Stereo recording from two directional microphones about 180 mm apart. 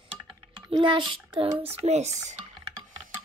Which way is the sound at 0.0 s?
30° right (ahead or behind).